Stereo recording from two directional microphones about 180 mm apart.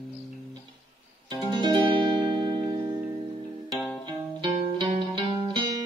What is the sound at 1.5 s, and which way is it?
Music, 25° right (ahead or behind).